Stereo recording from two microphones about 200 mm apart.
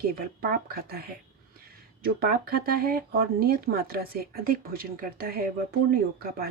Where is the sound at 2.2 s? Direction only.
50° right (ahead or behind).